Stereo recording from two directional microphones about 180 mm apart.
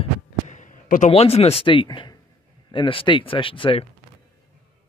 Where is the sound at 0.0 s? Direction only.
45° left (ahead or behind); by 2.1 s 25° left (ahead or behind).